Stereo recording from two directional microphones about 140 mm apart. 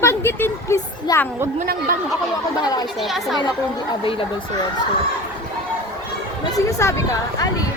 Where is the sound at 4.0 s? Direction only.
40° left (ahead or behind).